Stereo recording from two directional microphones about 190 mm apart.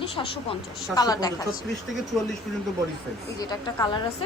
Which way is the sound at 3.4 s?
20° left (ahead or behind).